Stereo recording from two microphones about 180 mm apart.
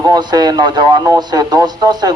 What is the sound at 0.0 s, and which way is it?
Speech, 20° right (ahead or behind).